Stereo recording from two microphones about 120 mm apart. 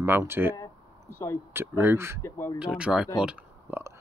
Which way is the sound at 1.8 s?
20° right (ahead or behind).